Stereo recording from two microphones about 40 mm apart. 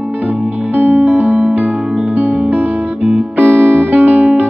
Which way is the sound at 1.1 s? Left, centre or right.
Right.